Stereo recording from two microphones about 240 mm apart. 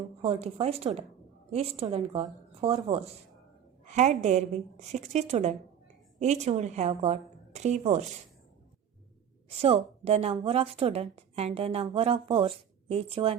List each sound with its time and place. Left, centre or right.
0.2 s a woman's voice: right
9.6 s a woman's voice: right